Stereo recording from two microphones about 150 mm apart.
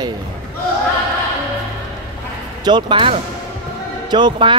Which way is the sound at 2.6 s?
30° right (ahead or behind).